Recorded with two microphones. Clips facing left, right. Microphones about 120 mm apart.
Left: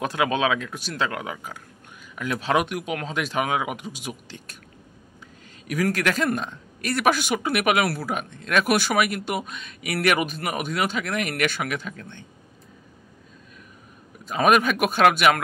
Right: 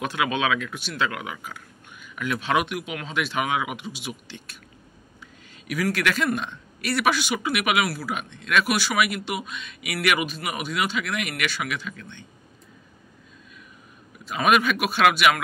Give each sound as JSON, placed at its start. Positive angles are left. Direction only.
{"t": 0.0, "sound": "speech", "side_deg": 35}
{"t": 5.7, "sound": "speech", "side_deg": 40}
{"t": 14.2, "sound": "speech", "side_deg": 40}